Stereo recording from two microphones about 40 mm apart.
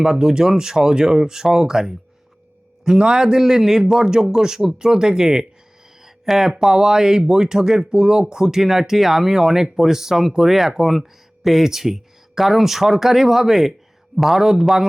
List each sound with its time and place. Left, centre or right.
0.0 s speech: centre
3.0 s a man's voice: right